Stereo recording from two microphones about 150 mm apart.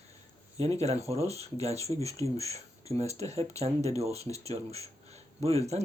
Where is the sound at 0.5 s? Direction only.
45° right (ahead or behind).